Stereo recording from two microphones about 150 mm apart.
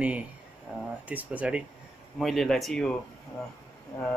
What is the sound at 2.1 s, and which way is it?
Speech, centre (ahead or behind).